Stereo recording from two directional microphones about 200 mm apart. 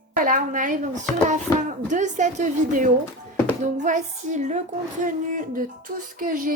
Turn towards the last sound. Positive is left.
turn(degrees=-45)  # may be behind; listen again after turning